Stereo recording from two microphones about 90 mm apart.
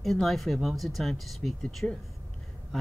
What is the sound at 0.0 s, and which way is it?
Speech, centre (ahead or behind).